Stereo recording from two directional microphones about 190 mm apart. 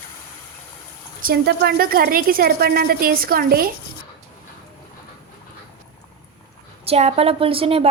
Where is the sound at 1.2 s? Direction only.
60° right (ahead or behind).